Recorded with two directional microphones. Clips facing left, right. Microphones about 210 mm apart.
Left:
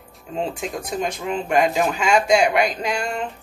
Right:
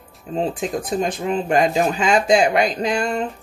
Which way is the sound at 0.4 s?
35° right (ahead or behind).